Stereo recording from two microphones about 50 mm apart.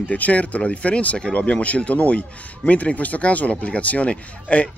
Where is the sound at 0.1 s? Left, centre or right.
Left.